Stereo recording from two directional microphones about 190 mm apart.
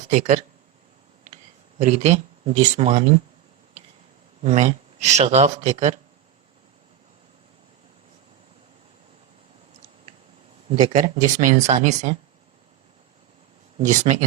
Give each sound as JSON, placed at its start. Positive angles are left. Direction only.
{"t": 0.1, "sound": "speech", "side_deg": -40}
{"t": 1.8, "sound": "speech", "side_deg": -35}
{"t": 4.4, "sound": "speech", "side_deg": -35}
{"t": 10.7, "sound": "speech", "side_deg": -30}
{"t": 10.9, "sound": "speech", "side_deg": -40}
{"t": 13.8, "sound": "speech", "side_deg": -40}